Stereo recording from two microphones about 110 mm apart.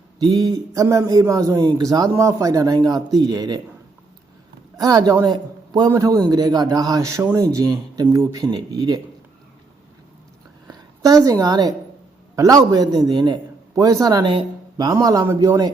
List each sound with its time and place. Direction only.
0.2 s a man's voice: 40° right (ahead or behind)
4.8 s a man's voice: 35° right (ahead or behind)
10.7 s a woman's voice: 35° right (ahead or behind)
15.0 s a man's voice: 30° right (ahead or behind)